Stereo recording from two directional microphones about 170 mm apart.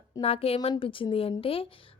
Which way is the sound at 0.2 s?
35° left (ahead or behind).